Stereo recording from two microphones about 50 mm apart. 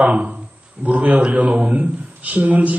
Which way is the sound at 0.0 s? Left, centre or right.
Right.